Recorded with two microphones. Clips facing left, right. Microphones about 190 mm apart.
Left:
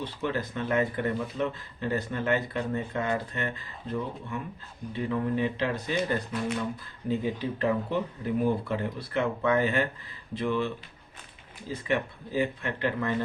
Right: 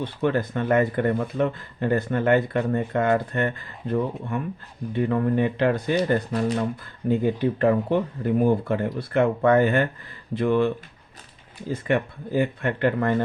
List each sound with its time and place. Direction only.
0.0 s speech: 55° right (ahead or behind)
6.1 s speech: 45° right (ahead or behind)
7.1 s speech: 55° right (ahead or behind)
11.9 s speech: 55° right (ahead or behind)